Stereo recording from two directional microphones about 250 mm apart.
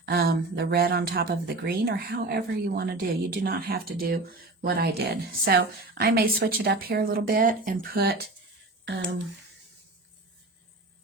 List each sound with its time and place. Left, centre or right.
0.0 s speech: right